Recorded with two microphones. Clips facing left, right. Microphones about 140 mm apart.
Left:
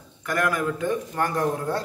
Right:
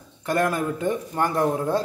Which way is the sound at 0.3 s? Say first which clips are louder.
Right 2 dB; 25° right (ahead or behind).